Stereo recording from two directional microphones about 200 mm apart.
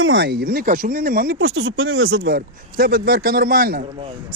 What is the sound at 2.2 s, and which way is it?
Speech, 50° right (ahead or behind).